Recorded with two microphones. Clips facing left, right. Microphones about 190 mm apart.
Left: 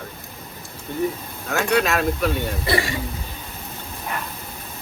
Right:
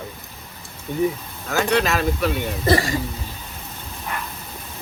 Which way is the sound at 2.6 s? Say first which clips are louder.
Right 6 dB; 40° right (ahead or behind).